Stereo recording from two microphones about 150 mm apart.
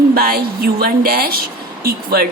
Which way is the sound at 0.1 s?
90° right.